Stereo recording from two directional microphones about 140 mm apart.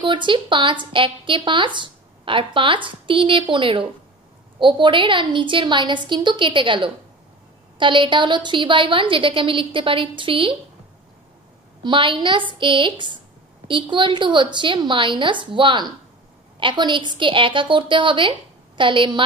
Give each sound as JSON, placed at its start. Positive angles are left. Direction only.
{"t": 0.0, "sound": "speech", "side_deg": -35}
{"t": 11.8, "sound": "speech", "side_deg": -35}